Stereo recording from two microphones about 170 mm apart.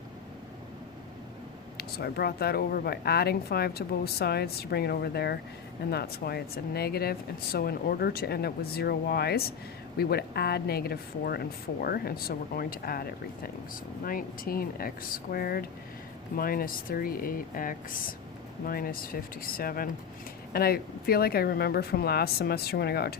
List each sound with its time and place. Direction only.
1.8 s speech: 65° left (ahead or behind)